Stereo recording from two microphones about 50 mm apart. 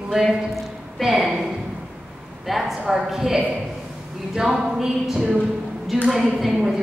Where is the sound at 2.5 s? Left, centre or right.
Centre.